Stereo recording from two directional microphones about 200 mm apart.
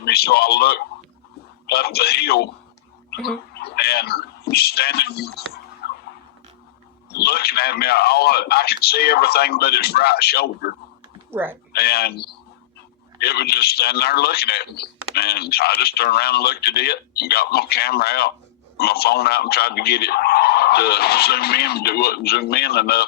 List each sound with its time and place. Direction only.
0.0 s a man's voice: 50° left (ahead or behind)
5.8 s a sound: 50° left (ahead or behind)
7.1 s a man's voice: 50° left (ahead or behind)
11.3 s speech: 10° right (ahead or behind)
11.7 s a man's voice: 50° left (ahead or behind)